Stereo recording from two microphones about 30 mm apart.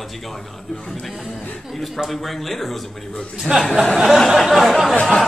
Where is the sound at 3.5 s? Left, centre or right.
Right.